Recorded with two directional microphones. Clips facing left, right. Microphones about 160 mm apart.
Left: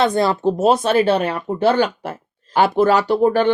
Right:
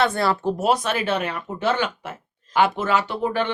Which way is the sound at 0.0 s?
20° left (ahead or behind).